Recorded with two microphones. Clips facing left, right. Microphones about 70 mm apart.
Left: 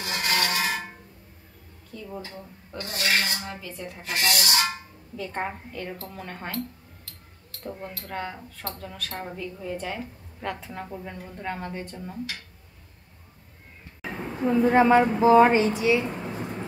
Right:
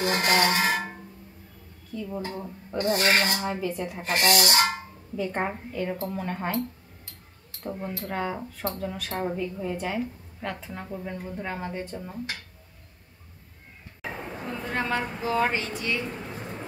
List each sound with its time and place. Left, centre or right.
0.0 s a sound: right
2.0 s a woman's voice: centre
2.8 s speech: right
3.5 s a woman's voice: centre
4.0 s rub: right
5.1 s a woman's voice: centre
7.6 s a woman's voice: centre
14.2 s a woman's voice: centre